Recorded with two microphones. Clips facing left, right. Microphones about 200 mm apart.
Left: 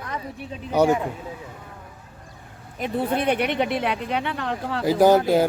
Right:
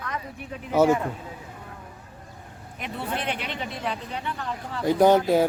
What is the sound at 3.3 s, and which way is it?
Speech, 65° left (ahead or behind).